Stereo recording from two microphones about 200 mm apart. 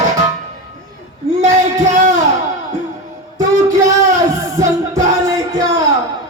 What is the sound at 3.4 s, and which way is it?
Music, 15° right (ahead or behind).